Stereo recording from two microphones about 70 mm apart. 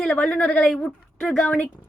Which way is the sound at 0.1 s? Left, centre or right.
Centre.